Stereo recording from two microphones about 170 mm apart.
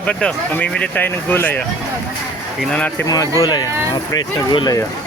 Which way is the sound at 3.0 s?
20° left (ahead or behind).